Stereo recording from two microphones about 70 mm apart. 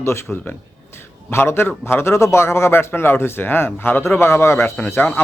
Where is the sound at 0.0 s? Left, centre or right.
Left.